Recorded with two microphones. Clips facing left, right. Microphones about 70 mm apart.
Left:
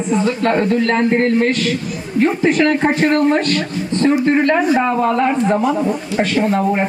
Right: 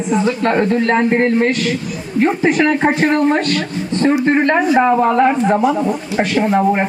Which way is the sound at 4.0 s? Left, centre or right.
Right.